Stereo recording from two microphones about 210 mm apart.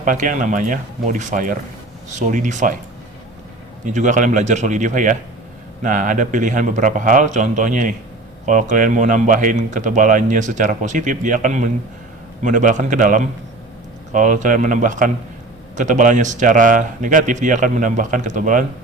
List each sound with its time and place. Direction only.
0.0 s speech: 40° right (ahead or behind)
3.8 s speech: 35° right (ahead or behind)